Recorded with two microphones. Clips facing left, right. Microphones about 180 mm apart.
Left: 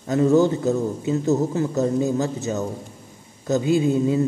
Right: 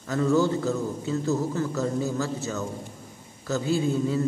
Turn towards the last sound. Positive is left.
turn(degrees=20)  # may be behind; listen again after turning